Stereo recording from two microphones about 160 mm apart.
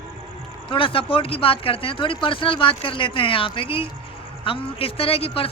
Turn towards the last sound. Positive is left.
turn(degrees=35)  # may be behind; listen again after turning